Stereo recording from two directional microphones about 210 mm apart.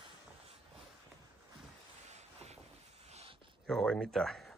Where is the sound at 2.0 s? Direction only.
30° right (ahead or behind).